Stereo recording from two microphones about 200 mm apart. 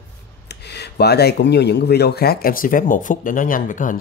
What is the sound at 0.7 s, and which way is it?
Speech, 55° left (ahead or behind).